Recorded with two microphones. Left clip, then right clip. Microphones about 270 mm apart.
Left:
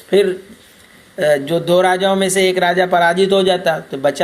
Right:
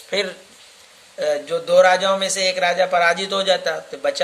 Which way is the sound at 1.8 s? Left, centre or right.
Centre.